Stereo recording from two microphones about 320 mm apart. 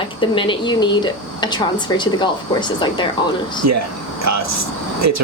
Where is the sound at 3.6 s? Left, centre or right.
Right.